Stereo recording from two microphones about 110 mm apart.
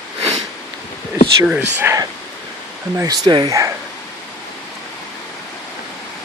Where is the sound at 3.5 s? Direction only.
30° right (ahead or behind).